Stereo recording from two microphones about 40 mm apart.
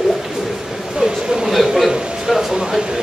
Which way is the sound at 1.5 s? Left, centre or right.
Centre.